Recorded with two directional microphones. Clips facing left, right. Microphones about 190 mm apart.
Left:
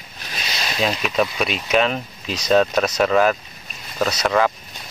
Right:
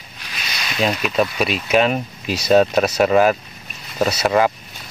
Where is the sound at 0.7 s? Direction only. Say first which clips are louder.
Right 2 dB; centre (ahead or behind).